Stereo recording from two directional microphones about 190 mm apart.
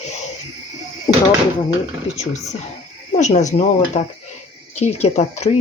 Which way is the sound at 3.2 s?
40° left (ahead or behind).